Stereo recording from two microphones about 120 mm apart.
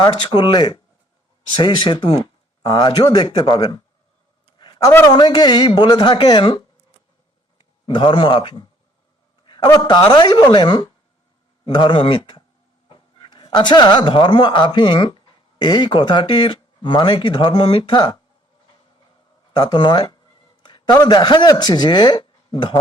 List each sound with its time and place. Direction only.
0.0 s speech: 40° left (ahead or behind)
4.5 s a sound: 40° left (ahead or behind)
4.9 s a man's voice: 25° left (ahead or behind)
5.1 s speech: 35° left (ahead or behind)
7.9 s speech: 45° left (ahead or behind)
9.6 s speech: 35° left (ahead or behind)
19.5 s speech: 40° left (ahead or behind)